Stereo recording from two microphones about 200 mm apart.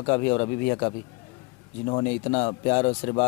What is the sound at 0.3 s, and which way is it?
Speech, 20° left (ahead or behind).